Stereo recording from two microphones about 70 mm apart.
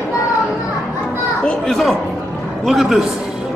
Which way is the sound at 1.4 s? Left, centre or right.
Centre.